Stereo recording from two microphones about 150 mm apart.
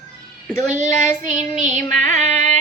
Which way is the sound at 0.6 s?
55° right (ahead or behind).